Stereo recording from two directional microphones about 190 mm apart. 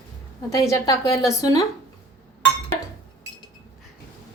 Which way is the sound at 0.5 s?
15° left (ahead or behind).